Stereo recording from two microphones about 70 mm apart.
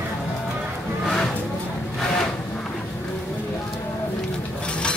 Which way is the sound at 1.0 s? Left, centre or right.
Centre.